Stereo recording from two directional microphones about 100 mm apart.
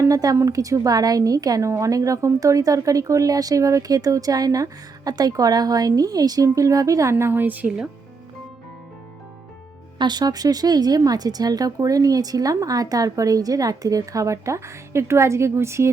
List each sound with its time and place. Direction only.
0.0 s a woman's voice: 35° right (ahead or behind); by 7.9 s 15° right (ahead or behind)
10.0 s a woman's voice: 45° right (ahead or behind); by 15.9 s 25° right (ahead or behind)